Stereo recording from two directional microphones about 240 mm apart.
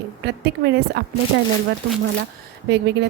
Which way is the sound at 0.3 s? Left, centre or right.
Right.